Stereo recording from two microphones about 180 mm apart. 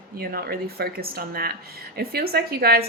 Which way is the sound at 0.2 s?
55° right (ahead or behind).